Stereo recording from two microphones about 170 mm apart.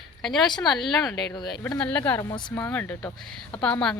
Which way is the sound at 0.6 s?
Centre (ahead or behind).